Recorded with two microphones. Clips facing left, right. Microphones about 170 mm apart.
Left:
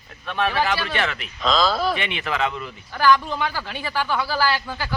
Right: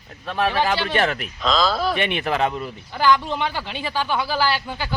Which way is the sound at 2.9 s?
20° right (ahead or behind).